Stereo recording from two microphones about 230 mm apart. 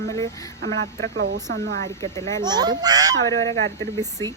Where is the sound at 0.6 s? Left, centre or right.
Right.